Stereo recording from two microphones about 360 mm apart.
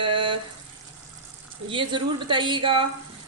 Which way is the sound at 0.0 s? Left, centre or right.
Centre.